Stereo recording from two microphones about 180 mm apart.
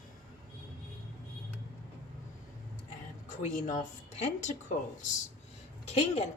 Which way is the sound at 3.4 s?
45° left (ahead or behind).